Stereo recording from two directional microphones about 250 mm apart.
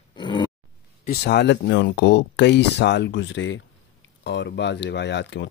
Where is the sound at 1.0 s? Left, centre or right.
Left.